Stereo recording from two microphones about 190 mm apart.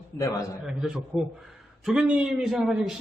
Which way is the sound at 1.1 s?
Centre (ahead or behind).